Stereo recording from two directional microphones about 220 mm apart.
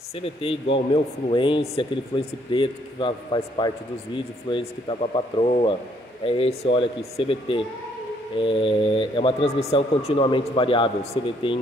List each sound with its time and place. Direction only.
0.1 s speech: 25° left (ahead or behind)